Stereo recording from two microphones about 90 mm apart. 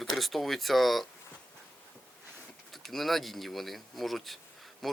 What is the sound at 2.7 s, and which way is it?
Speech, centre (ahead or behind).